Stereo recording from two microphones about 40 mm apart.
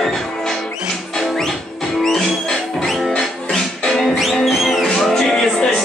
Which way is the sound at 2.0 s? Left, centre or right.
Centre.